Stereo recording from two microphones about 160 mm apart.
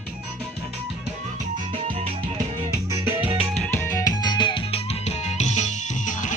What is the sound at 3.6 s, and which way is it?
Music, 15° left (ahead or behind).